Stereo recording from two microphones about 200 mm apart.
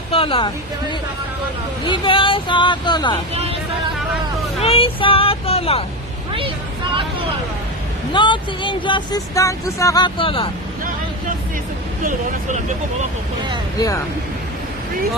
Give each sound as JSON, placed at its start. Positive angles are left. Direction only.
{"t": 0.1, "sound": "speech", "side_deg": 25}
{"t": 3.3, "sound": "vehicle", "side_deg": -30}
{"t": 4.6, "sound": "speech", "side_deg": 30}
{"t": 8.1, "sound": "speech", "side_deg": 25}
{"t": 13.7, "sound": "speech", "side_deg": 15}